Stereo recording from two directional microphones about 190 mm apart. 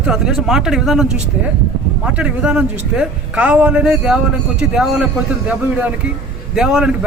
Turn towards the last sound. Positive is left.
turn(degrees=-5)  # may be behind; listen again after turning